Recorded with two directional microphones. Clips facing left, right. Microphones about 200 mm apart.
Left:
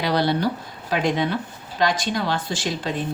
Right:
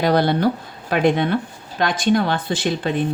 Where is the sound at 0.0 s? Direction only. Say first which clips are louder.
Right 4 dB; 50° right (ahead or behind).